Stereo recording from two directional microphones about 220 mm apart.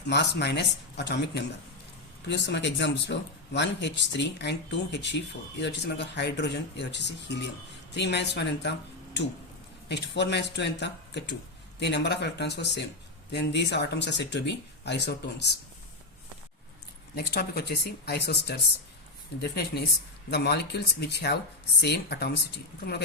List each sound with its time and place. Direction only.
0.1 s speech: 50° left (ahead or behind)
9.9 s speech: 50° left (ahead or behind)
17.2 s speech: 45° left (ahead or behind)